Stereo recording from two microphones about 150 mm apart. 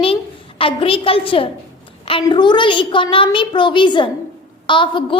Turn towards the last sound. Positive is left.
turn(degrees=35)  # may be behind; listen again after turning